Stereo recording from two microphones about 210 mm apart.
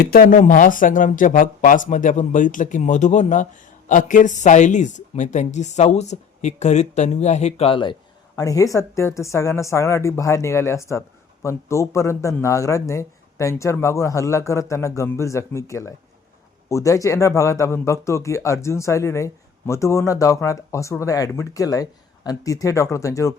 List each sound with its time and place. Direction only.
0.1 s speech: 40° left (ahead or behind); by 23.3 s 15° left (ahead or behind)